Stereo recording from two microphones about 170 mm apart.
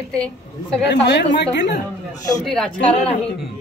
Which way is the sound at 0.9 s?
90° left.